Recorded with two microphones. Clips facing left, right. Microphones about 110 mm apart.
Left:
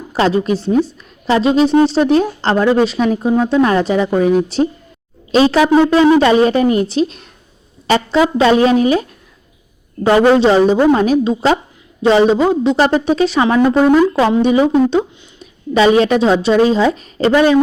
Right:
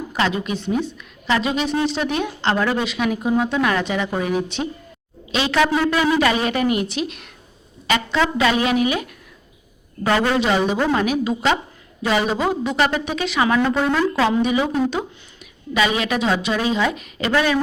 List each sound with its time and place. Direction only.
0.1 s a woman's voice: 35° left (ahead or behind)
13.7 s speech: 15° left (ahead or behind)
14.4 s a woman's voice: 35° left (ahead or behind)